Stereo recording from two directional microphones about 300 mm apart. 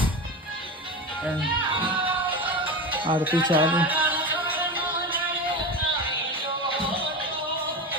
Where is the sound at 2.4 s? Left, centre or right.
Centre.